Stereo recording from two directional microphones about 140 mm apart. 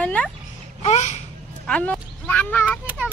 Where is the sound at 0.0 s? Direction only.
10° left (ahead or behind).